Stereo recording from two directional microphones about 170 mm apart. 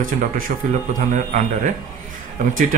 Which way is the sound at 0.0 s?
55° right (ahead or behind).